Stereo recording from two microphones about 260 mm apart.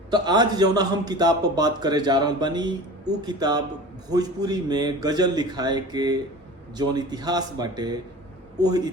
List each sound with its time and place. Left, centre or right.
0.1 s speech: centre